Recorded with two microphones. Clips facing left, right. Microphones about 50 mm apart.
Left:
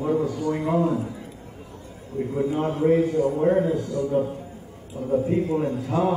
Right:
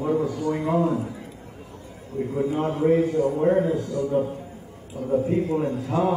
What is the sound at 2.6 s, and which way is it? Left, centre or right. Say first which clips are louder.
A man's voice: even; centre.